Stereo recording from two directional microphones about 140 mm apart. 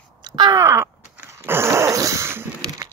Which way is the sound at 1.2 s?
15° right (ahead or behind).